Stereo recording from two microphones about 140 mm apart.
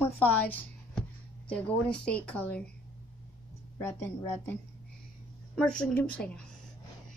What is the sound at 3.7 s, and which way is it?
A woman's voice, 20° left (ahead or behind).